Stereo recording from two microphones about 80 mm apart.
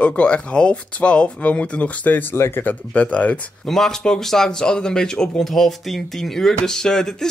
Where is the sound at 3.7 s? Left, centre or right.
Centre.